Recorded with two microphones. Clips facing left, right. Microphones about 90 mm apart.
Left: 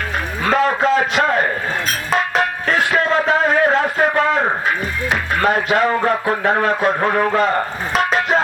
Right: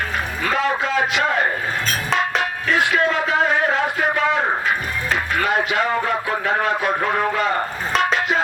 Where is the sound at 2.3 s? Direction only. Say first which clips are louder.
Left 3 dB; 40° left (ahead or behind).